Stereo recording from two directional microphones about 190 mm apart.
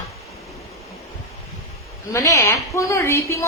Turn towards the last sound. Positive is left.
turn(degrees=15)  # may be behind; listen again after turning